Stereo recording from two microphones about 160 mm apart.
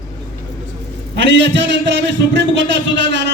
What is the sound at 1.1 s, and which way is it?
Music, 90° right.